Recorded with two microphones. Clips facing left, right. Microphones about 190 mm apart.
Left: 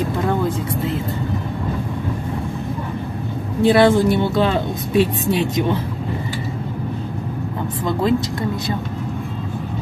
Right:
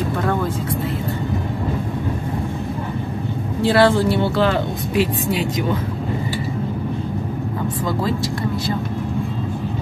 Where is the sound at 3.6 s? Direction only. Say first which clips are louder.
Left 2 dB; 15° left (ahead or behind).